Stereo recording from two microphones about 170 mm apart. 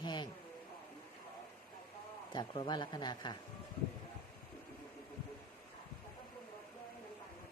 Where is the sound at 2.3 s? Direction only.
25° left (ahead or behind).